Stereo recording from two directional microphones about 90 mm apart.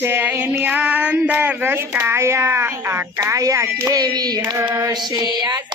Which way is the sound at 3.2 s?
40° right (ahead or behind).